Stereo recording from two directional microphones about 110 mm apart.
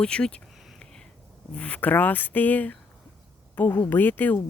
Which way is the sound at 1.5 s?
10° left (ahead or behind).